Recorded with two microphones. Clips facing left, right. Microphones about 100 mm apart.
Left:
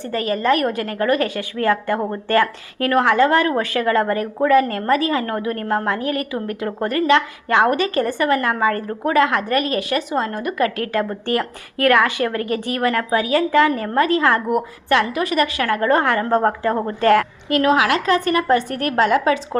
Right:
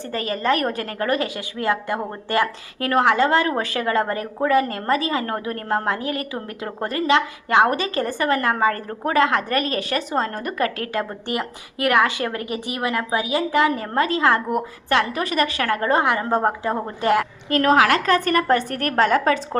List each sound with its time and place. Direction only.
0.1 s a woman's voice: 30° right (ahead or behind)
11.3 s a woman's voice: 15° right (ahead or behind)
17.5 s a woman's voice: 45° right (ahead or behind)